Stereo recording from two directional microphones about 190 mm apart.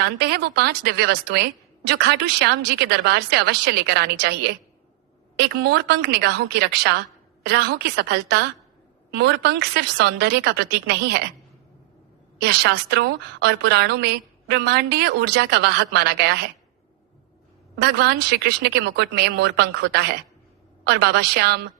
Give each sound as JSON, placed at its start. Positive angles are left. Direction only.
{"t": 0.0, "sound": "a woman's voice", "side_deg": -60}
{"t": 12.4, "sound": "a woman's voice", "side_deg": -65}
{"t": 17.7, "sound": "a woman's voice", "side_deg": -60}